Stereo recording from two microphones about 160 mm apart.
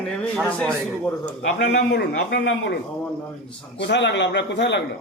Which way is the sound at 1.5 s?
90° left.